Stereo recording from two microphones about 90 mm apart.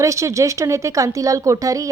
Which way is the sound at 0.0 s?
35° right (ahead or behind).